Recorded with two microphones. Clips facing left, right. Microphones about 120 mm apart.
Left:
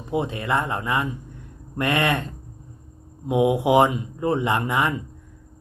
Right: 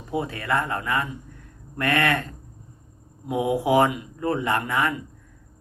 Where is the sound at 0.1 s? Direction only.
20° left (ahead or behind).